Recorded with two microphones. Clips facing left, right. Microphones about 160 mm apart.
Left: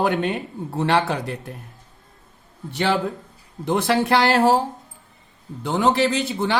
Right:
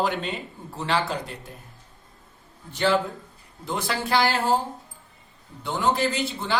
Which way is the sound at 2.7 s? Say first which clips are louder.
Left 1 dB; 70° left (ahead or behind).